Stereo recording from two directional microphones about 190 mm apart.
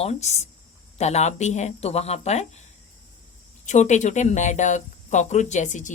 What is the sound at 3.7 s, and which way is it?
Speech, 40° left (ahead or behind).